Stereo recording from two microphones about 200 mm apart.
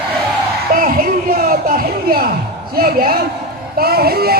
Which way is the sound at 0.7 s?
45° right (ahead or behind).